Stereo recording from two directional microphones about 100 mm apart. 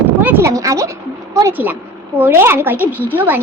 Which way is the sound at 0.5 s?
30° right (ahead or behind).